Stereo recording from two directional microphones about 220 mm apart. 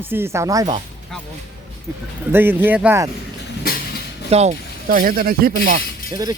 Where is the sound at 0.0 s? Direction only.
10° right (ahead or behind).